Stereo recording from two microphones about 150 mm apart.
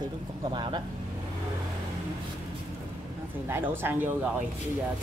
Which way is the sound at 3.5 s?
15° right (ahead or behind).